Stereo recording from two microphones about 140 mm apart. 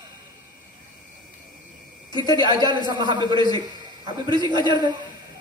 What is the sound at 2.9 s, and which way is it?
Speech, 30° right (ahead or behind).